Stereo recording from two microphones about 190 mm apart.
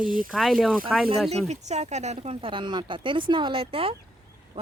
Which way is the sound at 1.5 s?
35° right (ahead or behind).